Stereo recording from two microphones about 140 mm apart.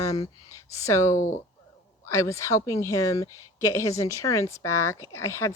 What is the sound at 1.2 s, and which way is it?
Speech, 65° left (ahead or behind).